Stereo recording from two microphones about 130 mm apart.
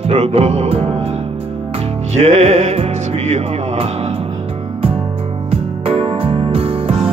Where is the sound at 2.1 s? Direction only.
65° right (ahead or behind).